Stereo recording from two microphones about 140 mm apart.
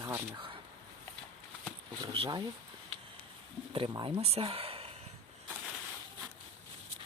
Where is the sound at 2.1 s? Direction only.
40° right (ahead or behind).